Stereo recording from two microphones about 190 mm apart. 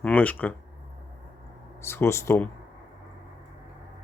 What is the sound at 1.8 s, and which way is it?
Speech, 15° left (ahead or behind).